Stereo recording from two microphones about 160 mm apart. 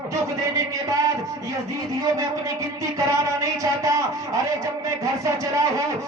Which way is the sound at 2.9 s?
20° right (ahead or behind).